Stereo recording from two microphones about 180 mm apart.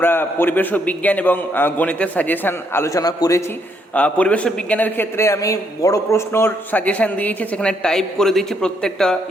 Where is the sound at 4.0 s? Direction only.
5° left (ahead or behind).